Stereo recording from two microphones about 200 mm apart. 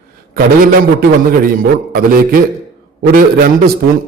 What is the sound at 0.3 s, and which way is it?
A man's voice, 45° right (ahead or behind).